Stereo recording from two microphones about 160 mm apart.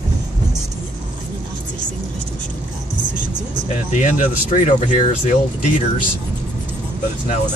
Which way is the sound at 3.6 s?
50° left (ahead or behind).